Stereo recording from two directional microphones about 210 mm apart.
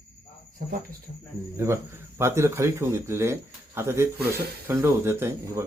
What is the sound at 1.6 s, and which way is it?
Speech, 10° right (ahead or behind).